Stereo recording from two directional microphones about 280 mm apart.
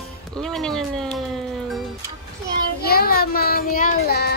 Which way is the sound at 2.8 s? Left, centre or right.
Left.